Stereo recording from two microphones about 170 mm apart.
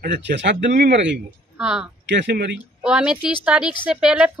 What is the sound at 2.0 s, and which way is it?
Speech, 90° right.